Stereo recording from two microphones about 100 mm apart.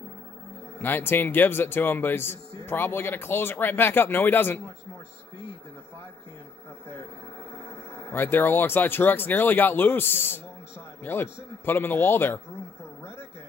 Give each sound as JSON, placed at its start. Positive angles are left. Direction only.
{"t": 0.7, "sound": "speech", "side_deg": 20}
{"t": 7.9, "sound": "speech", "side_deg": 25}